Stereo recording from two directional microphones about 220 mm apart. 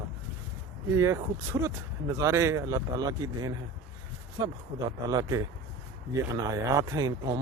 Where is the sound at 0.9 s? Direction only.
15° right (ahead or behind).